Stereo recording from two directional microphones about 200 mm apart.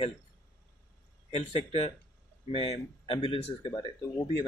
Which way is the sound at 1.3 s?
30° left (ahead or behind).